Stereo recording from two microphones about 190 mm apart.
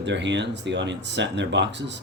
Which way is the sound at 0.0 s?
70° right (ahead or behind).